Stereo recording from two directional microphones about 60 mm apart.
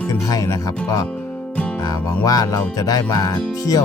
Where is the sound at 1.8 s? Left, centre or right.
Left.